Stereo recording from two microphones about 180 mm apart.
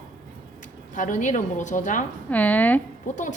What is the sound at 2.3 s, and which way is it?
Speech, 10° left (ahead or behind).